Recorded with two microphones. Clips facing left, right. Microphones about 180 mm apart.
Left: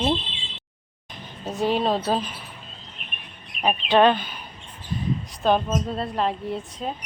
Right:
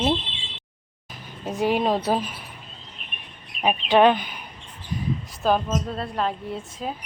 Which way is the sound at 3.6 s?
15° right (ahead or behind).